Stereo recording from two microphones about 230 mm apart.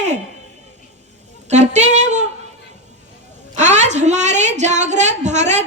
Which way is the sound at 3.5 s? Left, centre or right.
Right.